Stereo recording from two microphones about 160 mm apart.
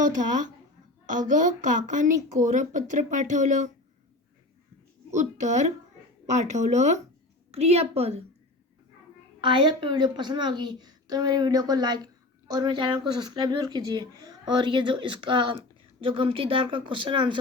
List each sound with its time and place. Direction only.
1.3 s speech: 55° right (ahead or behind)
5.1 s a woman's voice: 45° right (ahead or behind)
9.4 s a woman's voice: 30° right (ahead or behind)